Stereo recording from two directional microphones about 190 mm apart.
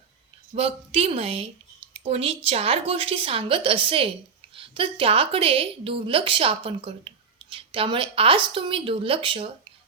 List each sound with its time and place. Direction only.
0.5 s a woman's voice: 30° right (ahead or behind)